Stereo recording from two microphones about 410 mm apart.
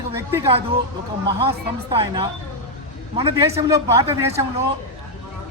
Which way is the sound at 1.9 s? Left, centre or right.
Centre.